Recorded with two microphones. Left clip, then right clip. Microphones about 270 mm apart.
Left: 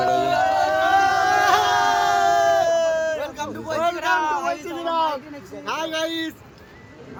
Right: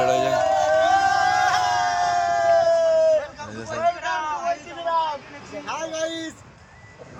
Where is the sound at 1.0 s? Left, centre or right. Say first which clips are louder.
Left 1 dB; left.